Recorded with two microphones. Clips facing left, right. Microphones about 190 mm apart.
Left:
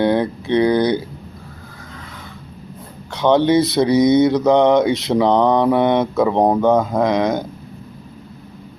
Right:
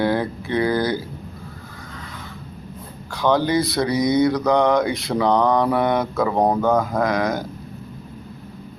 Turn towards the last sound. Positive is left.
turn(degrees=20)  # may be behind; listen again after turning